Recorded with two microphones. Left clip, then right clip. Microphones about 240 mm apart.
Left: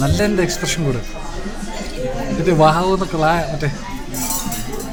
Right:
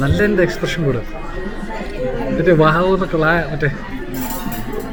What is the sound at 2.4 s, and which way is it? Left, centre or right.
A man's voice, centre.